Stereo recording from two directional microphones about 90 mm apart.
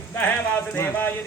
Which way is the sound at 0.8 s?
20° left (ahead or behind).